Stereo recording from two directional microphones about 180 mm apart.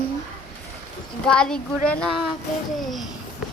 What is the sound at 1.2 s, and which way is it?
Speech, 5° left (ahead or behind).